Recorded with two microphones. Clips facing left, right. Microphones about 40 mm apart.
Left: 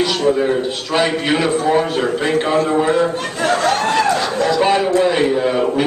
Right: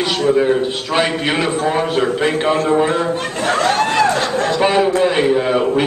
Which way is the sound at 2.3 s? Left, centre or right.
Centre.